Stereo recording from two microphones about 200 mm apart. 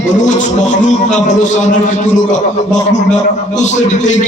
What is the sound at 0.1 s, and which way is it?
A man's voice, 35° left (ahead or behind).